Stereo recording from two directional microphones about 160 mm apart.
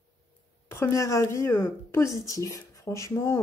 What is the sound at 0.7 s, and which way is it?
Speech, 15° left (ahead or behind).